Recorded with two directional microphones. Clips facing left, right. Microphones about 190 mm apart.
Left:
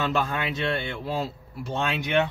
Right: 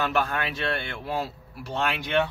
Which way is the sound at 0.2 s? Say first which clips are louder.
Left 1 dB; 20° left (ahead or behind).